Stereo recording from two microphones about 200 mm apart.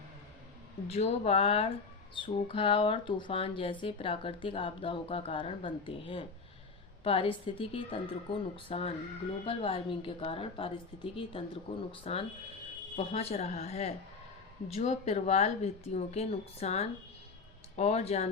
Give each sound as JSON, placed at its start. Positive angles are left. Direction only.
{"t": 0.9, "sound": "speech", "side_deg": 30}